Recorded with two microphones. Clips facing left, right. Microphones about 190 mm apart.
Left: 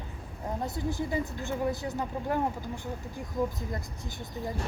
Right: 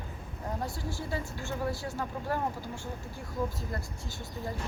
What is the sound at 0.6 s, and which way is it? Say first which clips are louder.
Speech: left 5 dB; 20° left (ahead or behind).